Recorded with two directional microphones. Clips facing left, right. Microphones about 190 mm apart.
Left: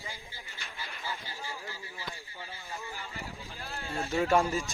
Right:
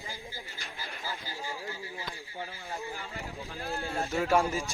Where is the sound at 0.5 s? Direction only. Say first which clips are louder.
Right 2 dB; 35° right (ahead or behind).